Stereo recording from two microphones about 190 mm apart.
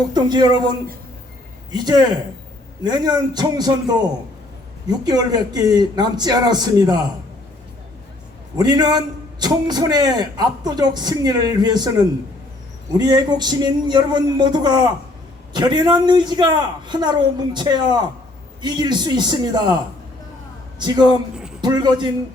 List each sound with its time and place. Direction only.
0.1 s a man's voice: 20° right (ahead or behind)
8.5 s a man's voice: 20° right (ahead or behind)